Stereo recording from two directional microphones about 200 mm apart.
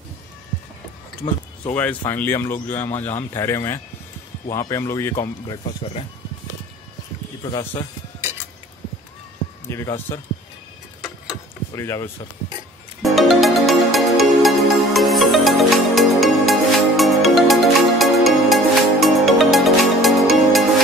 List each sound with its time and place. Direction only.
1.7 s speech: 10° left (ahead or behind)
9.7 s speech: 15° left (ahead or behind)
11.2 s a sound: 15° left (ahead or behind)
13.0 s music: centre (ahead or behind)